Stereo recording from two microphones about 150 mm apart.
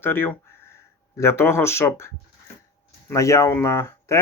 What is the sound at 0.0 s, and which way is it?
Speech, 15° left (ahead or behind).